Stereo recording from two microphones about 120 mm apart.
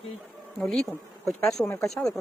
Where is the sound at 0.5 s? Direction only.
Centre (ahead or behind).